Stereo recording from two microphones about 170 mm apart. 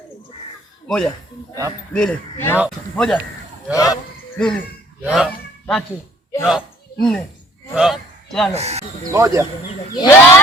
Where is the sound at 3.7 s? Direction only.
20° left (ahead or behind).